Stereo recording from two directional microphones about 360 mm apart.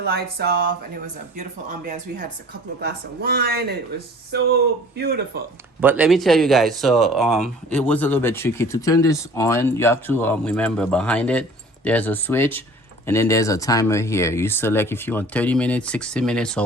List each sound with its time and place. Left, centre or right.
0.0 s speech: right
2.8 s speech: right
5.8 s speech: centre